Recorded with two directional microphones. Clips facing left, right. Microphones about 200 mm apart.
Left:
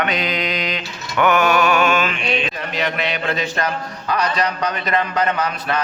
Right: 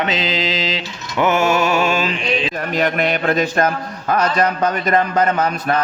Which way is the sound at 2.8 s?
50° right (ahead or behind).